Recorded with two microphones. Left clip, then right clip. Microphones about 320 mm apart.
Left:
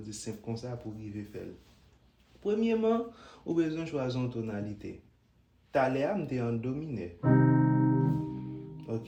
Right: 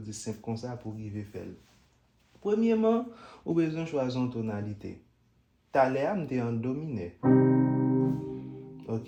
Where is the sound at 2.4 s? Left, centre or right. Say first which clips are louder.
Right 2 dB; centre.